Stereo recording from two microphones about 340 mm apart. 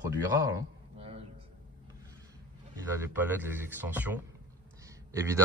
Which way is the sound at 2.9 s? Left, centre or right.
Centre.